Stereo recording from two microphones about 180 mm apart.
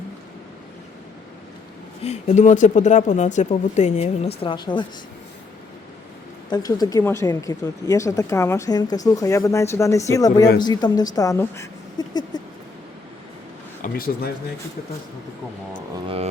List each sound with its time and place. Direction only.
2.0 s speech: 40° left (ahead or behind); by 4.9 s 25° left (ahead or behind)
6.5 s speech: 20° left (ahead or behind)
13.8 s speech: 55° left (ahead or behind)
16.0 s speech: 35° right (ahead or behind)